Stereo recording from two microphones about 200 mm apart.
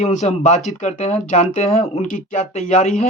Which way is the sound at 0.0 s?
35° left (ahead or behind).